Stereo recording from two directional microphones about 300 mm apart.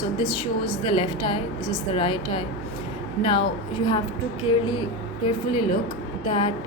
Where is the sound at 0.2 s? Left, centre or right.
Centre.